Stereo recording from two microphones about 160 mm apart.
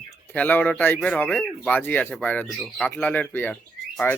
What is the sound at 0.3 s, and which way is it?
Speech, 10° left (ahead or behind).